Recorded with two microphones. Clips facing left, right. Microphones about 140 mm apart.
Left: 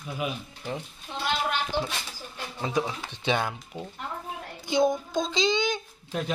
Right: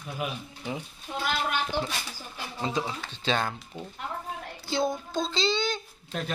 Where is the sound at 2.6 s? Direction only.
15° left (ahead or behind).